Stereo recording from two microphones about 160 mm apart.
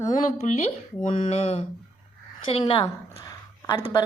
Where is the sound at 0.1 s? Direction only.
50° left (ahead or behind).